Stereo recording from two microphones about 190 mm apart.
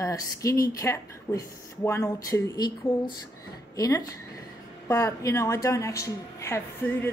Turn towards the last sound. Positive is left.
turn(degrees=15)  # may be behind; listen again after turning